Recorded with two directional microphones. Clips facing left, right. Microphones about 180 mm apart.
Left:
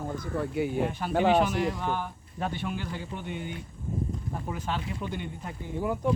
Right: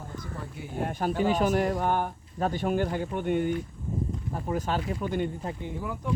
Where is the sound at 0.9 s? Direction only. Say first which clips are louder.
Right 2 dB; 45° right (ahead or behind).